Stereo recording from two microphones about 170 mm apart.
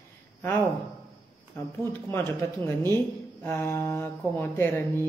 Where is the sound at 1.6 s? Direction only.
15° left (ahead or behind).